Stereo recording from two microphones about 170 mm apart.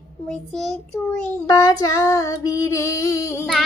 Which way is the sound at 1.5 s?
20° left (ahead or behind).